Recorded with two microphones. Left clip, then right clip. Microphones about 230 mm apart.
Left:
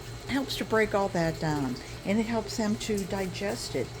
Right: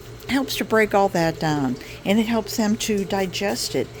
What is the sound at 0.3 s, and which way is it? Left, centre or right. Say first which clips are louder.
A woman's voice: right 7 dB; right.